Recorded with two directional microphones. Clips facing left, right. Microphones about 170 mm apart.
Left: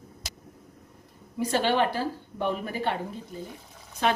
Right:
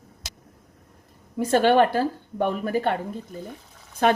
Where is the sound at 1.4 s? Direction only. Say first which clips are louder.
Right 6 dB; 50° right (ahead or behind).